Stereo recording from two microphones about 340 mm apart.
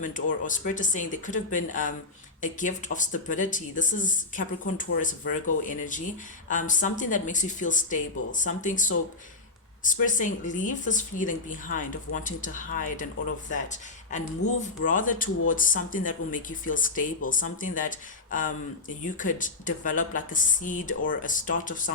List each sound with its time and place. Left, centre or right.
0.0 s speech: left
14.1 s speech: left